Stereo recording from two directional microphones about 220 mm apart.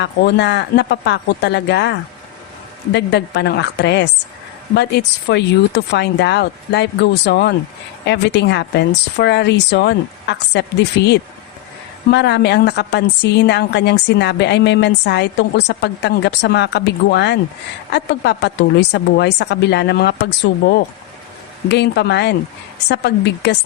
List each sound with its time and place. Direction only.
0.0 s a woman's voice: 50° left (ahead or behind)